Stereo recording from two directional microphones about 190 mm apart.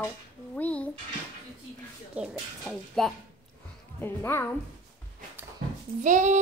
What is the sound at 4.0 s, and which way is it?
Speech, 10° left (ahead or behind).